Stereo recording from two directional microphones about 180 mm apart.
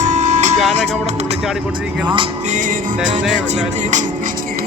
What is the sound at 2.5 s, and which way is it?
Music, 45° right (ahead or behind).